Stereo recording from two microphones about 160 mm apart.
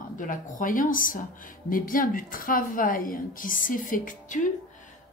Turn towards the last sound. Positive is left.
turn(degrees=55)  # may be behind; listen again after turning